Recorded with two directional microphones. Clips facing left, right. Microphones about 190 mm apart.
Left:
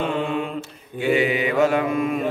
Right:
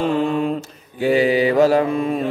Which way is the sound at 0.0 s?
40° right (ahead or behind).